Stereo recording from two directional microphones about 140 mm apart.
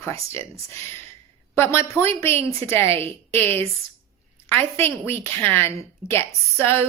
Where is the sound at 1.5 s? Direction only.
15° left (ahead or behind).